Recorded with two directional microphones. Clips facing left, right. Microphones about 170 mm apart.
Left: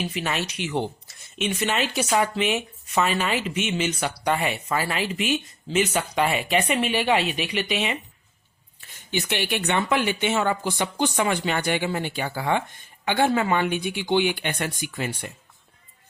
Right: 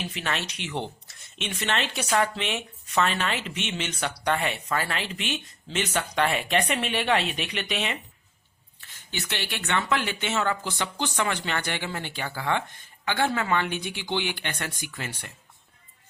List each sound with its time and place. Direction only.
0.0 s speech: 5° left (ahead or behind)
8.9 s speech: 15° left (ahead or behind)